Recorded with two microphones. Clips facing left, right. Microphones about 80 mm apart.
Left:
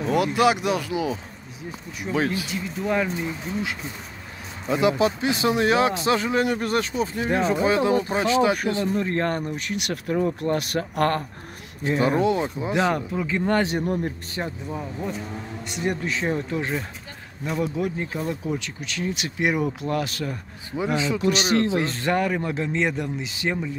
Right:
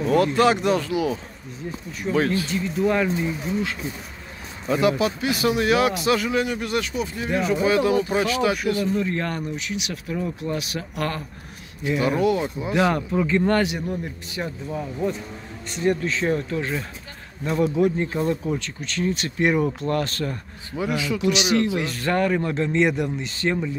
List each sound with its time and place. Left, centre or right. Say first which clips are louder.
0.0 s speech: right 2 dB; centre
4.6 s a man's voice: even; centre
8.8 s speech: left 1 dB; left
11.8 s speech: even; left
12.7 s speech: right 2 dB; centre
13.1 s speech: right 5 dB; centre
13.7 s speech: left 3 dB; left
14.4 s speech: right 1 dB; left
15.7 s speech: right 4 dB; centre
17.5 s speech: right 5 dB; centre
20.8 s a man's voice: even; left
22.0 s speech: right 5 dB; centre